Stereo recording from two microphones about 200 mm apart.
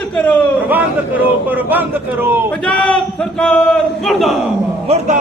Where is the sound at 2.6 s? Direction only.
5° left (ahead or behind).